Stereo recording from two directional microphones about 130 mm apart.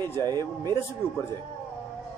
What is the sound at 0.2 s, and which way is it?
Speech, 30° right (ahead or behind).